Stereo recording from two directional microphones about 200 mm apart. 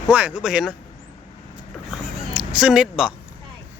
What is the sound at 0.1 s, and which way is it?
Speech, 5° right (ahead or behind).